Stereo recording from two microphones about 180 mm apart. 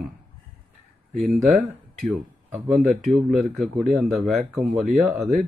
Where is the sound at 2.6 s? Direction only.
Centre (ahead or behind).